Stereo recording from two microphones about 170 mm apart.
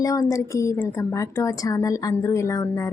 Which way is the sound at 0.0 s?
20° left (ahead or behind).